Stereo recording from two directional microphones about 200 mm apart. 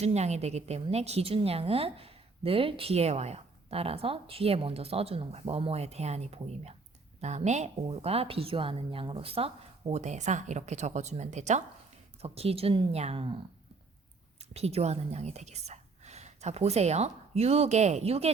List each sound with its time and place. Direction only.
0.0 s a woman's voice: 35° right (ahead or behind)
14.5 s a woman's voice: 30° right (ahead or behind)